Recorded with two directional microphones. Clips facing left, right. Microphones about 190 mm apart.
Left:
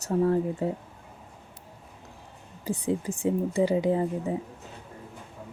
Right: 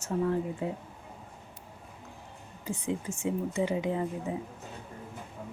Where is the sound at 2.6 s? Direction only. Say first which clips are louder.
Left 5 dB; 35° left (ahead or behind).